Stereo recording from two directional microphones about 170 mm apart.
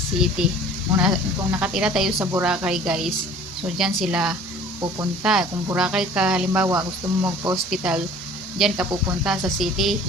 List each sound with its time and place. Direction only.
0.4 s speech: 5° right (ahead or behind)
6.7 s speech: 20° right (ahead or behind)
7.5 s speech: centre (ahead or behind)